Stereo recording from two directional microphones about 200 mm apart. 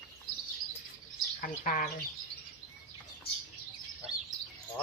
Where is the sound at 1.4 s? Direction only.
40° left (ahead or behind).